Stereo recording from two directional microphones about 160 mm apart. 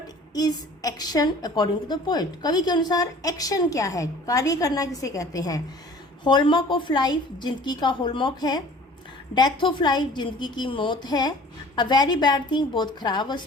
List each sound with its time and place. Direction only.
0.3 s a woman's voice: 25° left (ahead or behind)